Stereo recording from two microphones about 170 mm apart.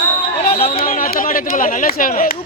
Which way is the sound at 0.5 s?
35° left (ahead or behind).